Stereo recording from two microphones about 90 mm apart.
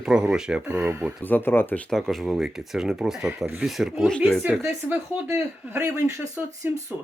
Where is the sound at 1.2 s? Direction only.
20° left (ahead or behind).